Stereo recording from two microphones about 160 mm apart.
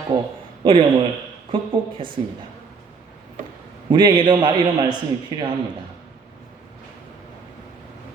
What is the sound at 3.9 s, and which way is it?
A man's voice, 30° right (ahead or behind).